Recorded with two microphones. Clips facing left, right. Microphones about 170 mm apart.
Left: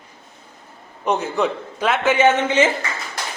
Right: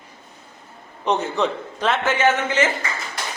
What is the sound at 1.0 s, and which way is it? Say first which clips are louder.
A man's voice: left 1 dB; 5° left (ahead or behind).